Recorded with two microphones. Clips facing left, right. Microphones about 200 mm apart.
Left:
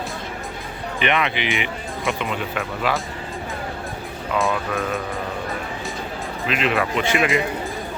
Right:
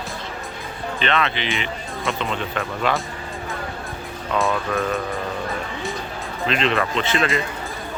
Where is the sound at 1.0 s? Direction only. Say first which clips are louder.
Left 1 dB; 15° left (ahead or behind).